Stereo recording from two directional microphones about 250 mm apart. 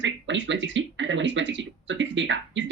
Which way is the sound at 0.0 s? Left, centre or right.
Right.